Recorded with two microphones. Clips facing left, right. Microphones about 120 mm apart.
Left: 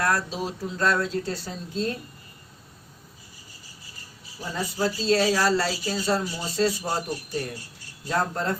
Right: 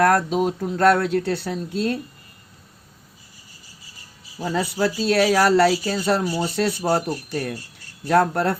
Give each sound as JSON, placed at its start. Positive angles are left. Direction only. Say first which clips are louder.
{"t": 0.0, "sound": "speech", "louder": "right 8 dB", "side_deg": -55}
{"t": 4.4, "sound": "speech", "louder": "right 5 dB", "side_deg": -75}